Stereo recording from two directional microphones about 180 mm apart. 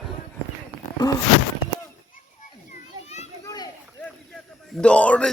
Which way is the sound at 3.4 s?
20° left (ahead or behind).